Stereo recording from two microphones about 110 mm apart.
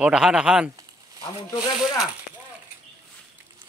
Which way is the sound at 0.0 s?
5° right (ahead or behind).